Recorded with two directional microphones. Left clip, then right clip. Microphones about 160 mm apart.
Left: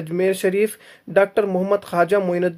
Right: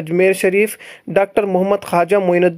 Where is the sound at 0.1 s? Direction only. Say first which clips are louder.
Right 6 dB; 30° right (ahead or behind).